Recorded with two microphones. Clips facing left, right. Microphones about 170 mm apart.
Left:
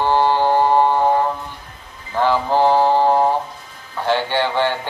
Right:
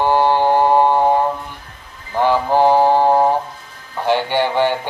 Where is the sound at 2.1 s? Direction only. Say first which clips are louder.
Right 2 dB; 15° right (ahead or behind).